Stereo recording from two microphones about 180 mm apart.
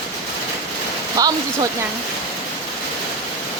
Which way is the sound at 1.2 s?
20° right (ahead or behind).